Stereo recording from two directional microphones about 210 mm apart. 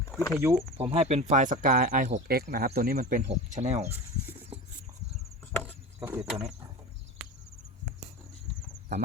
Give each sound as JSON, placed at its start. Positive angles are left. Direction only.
{"t": 0.3, "sound": "speech", "side_deg": -10}
{"t": 0.8, "sound": "speech", "side_deg": -30}
{"t": 6.1, "sound": "a sound", "side_deg": 0}